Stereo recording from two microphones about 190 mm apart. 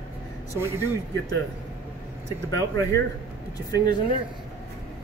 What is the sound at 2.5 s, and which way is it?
Speech, 15° left (ahead or behind).